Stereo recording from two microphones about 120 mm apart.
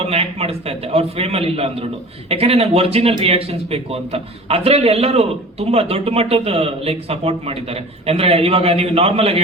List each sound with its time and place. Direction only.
0.0 s speech: 55° right (ahead or behind)